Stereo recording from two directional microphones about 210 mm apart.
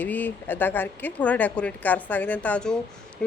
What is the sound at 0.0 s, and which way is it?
Speech, 10° left (ahead or behind).